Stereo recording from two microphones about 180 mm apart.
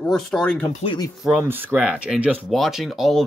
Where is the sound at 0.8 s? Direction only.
25° left (ahead or behind).